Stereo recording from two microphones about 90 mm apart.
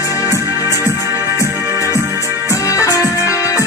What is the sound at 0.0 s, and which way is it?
Music, 35° left (ahead or behind).